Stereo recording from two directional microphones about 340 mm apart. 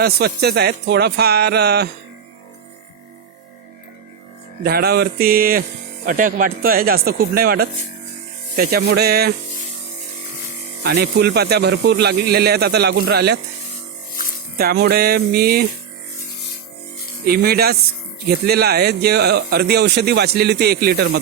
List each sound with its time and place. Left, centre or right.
0.0 s speech: right
4.6 s speech: right
10.8 s speech: right
14.6 s speech: right
17.2 s speech: right